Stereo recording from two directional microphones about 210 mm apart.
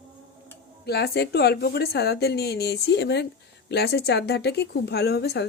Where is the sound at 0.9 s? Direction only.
50° left (ahead or behind).